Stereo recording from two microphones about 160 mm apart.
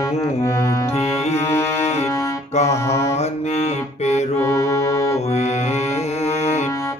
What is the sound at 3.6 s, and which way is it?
Music, 45° left (ahead or behind).